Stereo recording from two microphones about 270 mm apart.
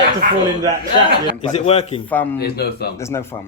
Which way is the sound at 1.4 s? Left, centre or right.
Left.